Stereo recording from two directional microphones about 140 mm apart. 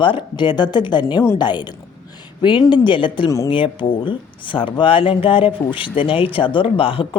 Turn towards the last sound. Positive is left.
turn(degrees=40)  # may be behind; listen again after turning